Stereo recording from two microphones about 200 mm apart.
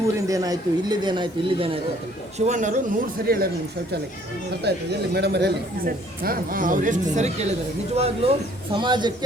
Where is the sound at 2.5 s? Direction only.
40° right (ahead or behind).